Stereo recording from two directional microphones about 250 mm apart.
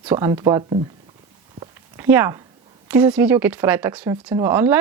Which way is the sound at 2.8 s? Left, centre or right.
Centre.